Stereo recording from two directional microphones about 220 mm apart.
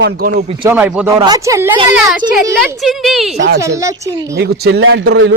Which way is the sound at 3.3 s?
50° right (ahead or behind).